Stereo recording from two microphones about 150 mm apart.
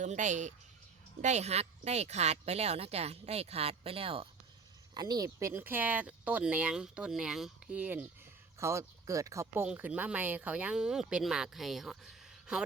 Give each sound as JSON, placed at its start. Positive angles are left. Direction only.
{"t": 0.0, "sound": "speech", "side_deg": -55}
{"t": 4.9, "sound": "speech", "side_deg": -25}
{"t": 9.6, "sound": "speech", "side_deg": -10}